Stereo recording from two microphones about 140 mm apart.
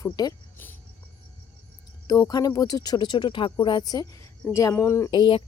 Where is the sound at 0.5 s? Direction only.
15° left (ahead or behind).